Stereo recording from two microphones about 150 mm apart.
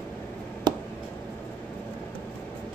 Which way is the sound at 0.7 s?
30° right (ahead or behind).